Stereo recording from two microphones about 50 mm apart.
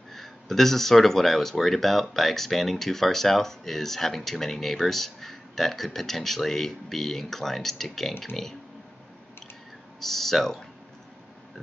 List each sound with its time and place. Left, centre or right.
0.1 s speech: centre
9.9 s speech: centre